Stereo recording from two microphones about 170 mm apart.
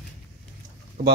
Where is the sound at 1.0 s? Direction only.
60° right (ahead or behind).